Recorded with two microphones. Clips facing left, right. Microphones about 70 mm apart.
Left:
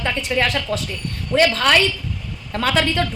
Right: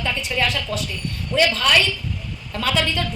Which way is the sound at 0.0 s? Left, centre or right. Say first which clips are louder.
Left 3 dB; left.